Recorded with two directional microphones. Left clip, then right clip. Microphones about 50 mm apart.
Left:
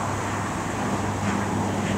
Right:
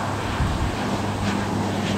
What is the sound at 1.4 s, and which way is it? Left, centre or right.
Vehicle, right.